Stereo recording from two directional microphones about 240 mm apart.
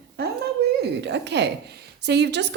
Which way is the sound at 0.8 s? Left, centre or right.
Right.